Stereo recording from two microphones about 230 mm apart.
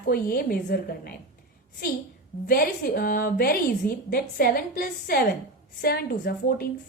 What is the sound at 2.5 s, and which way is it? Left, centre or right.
A woman's voice, left.